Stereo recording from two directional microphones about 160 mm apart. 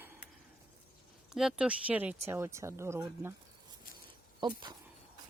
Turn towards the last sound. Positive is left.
turn(degrees=-30)  # may be behind; listen again after turning